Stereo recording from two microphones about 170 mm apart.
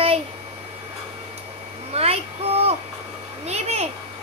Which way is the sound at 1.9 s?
35° right (ahead or behind).